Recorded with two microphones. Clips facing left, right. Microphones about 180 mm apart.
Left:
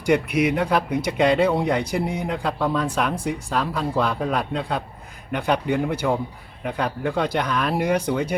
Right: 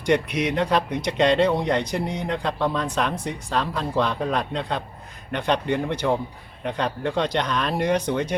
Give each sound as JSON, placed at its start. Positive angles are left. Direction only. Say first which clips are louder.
{"t": 0.0, "sound": "speech", "louder": "left 2 dB", "side_deg": 10}